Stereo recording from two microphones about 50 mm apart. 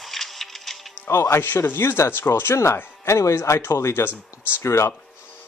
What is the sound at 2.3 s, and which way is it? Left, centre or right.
Speech, left.